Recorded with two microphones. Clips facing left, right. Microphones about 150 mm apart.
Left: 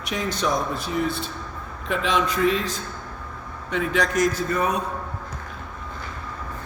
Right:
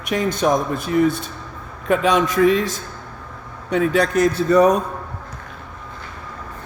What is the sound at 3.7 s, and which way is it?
Speech, 35° right (ahead or behind).